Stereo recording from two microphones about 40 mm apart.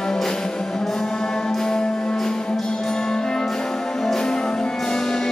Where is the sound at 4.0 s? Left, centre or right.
Centre.